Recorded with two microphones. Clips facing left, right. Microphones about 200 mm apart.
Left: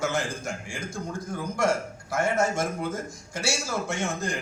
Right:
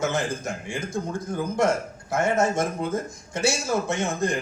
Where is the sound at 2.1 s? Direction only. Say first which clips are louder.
Right 3 dB; 20° right (ahead or behind).